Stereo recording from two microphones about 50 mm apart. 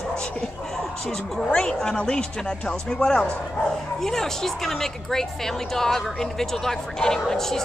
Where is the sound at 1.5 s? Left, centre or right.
Centre.